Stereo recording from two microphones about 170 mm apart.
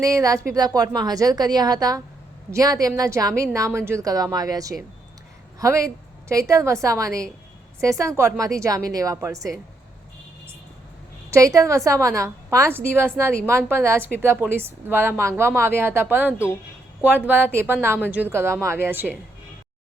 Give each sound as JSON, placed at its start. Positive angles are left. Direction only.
{"t": 0.0, "sound": "a woman's voice", "side_deg": -20}
{"t": 11.3, "sound": "a woman's voice", "side_deg": -20}